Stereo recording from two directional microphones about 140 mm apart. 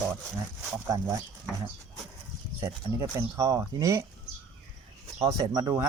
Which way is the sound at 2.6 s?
20° right (ahead or behind).